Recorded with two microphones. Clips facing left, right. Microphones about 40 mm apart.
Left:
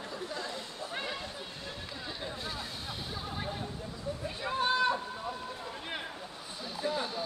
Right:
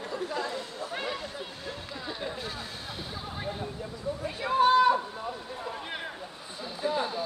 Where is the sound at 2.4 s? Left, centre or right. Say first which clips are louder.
Right 2 dB; centre.